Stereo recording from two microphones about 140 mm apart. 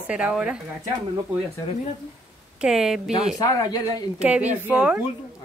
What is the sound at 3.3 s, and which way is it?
Speech, 30° left (ahead or behind).